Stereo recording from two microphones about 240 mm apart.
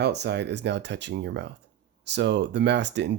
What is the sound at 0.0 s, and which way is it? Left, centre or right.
Speech, right.